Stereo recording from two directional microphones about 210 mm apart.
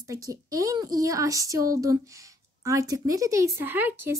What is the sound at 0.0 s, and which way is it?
A child's voice, 15° right (ahead or behind).